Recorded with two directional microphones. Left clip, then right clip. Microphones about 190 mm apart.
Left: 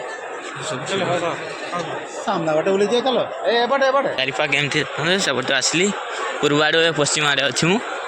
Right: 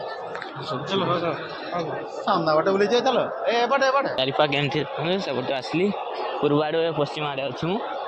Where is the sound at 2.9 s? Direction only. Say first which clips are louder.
Left 2 dB; 10° left (ahead or behind).